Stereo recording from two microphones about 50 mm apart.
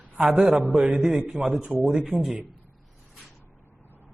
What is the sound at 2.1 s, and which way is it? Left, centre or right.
Speech, left.